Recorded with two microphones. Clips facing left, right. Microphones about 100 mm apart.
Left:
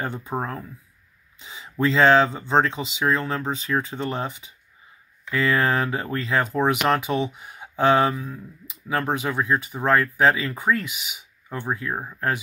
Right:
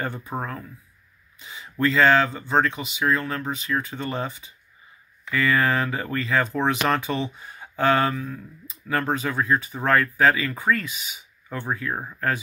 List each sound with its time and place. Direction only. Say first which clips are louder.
0.0 s speech: left 2 dB; 15° left (ahead or behind)
3.5 s speech: left 2 dB; 35° left (ahead or behind)
3.9 s speech: left 1 dB; 15° left (ahead or behind)